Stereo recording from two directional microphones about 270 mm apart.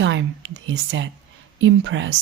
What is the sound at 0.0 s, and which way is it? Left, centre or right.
Speech, right.